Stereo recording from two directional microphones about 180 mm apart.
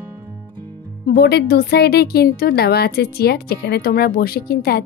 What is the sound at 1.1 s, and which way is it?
A woman's voice, 60° left (ahead or behind).